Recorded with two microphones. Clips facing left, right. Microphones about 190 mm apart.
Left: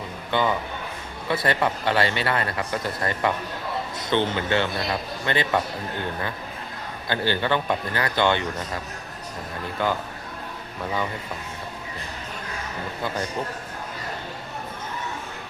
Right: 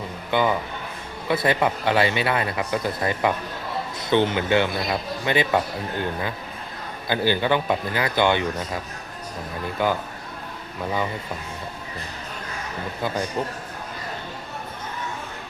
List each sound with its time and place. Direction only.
0.3 s a man's voice: 10° right (ahead or behind)
7.1 s speech: 10° right (ahead or behind)
9.8 s speech: 15° right (ahead or behind)